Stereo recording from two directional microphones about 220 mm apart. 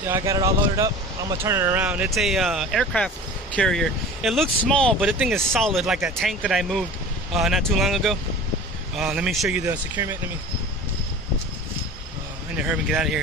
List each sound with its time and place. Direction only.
0.1 s speech: 15° right (ahead or behind)
12.5 s speech: 5° right (ahead or behind)